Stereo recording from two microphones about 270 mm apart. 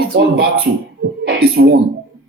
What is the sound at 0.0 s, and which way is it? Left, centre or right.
Speech, right.